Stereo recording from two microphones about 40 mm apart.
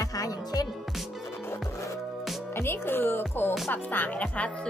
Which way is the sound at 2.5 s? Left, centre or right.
Left.